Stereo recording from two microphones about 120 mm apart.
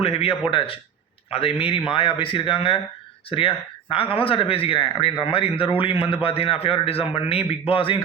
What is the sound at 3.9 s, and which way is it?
Speech, 50° left (ahead or behind).